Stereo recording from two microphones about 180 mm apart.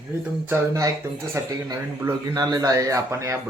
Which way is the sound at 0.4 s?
15° right (ahead or behind).